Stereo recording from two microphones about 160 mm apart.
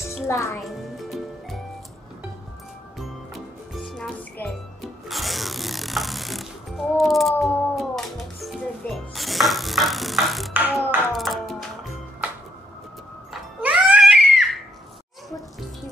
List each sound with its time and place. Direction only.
0.3 s a child's voice: 20° left (ahead or behind)
0.6 s music: centre (ahead or behind)
3.0 s music: centre (ahead or behind)
7.0 s cat: centre (ahead or behind)
10.5 s a sound: 10° right (ahead or behind)
13.3 s music: 10° right (ahead or behind)